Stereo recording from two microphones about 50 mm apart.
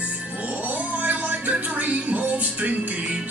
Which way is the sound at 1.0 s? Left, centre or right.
Right.